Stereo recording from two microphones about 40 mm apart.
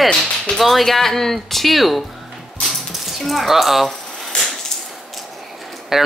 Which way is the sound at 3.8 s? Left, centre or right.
Centre.